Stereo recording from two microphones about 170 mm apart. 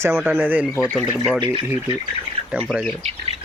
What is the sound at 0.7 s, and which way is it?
Speech, 15° left (ahead or behind).